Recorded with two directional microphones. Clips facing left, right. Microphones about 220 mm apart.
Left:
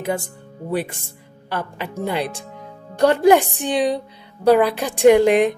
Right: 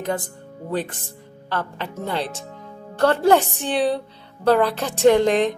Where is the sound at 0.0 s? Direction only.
10° left (ahead or behind).